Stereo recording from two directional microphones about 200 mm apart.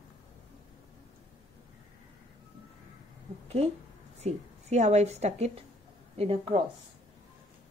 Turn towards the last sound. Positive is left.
turn(degrees=-25)  # may be behind; listen again after turning